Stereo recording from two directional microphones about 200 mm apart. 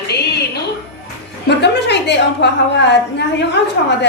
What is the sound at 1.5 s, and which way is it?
A woman's voice, 60° left (ahead or behind).